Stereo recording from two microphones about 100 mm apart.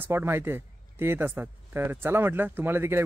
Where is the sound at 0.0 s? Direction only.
25° right (ahead or behind).